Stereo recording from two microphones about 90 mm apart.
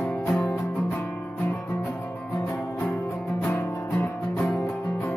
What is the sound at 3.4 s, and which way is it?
Music, 20° left (ahead or behind).